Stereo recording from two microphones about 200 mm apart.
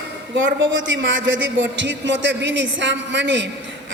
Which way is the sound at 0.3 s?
65° right (ahead or behind).